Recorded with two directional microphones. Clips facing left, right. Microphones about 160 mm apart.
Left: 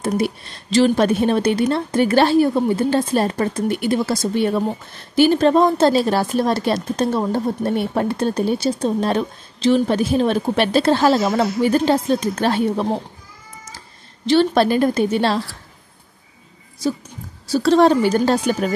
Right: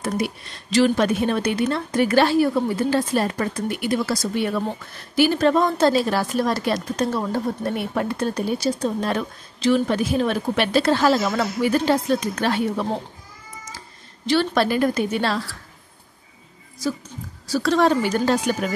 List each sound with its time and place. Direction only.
0.7 s speech: 30° left (ahead or behind)
14.2 s speech: 25° left (ahead or behind)
17.5 s a woman's voice: 30° left (ahead or behind)